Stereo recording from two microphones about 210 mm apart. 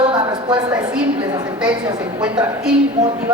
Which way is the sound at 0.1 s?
20° right (ahead or behind).